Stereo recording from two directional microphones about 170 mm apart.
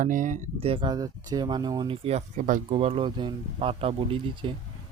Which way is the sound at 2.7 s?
35° right (ahead or behind).